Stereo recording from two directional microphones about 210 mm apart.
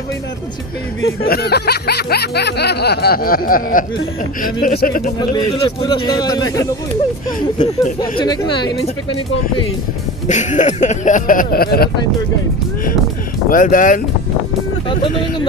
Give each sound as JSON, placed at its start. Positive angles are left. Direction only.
{"t": 1.0, "sound": "music", "side_deg": 50}
{"t": 5.3, "sound": "a man's voice", "side_deg": 20}
{"t": 10.2, "sound": "speech", "side_deg": 35}
{"t": 13.5, "sound": "speech", "side_deg": 40}
{"t": 14.9, "sound": "a man's voice", "side_deg": 25}